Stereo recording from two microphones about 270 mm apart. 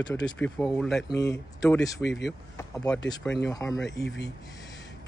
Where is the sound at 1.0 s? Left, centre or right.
Centre.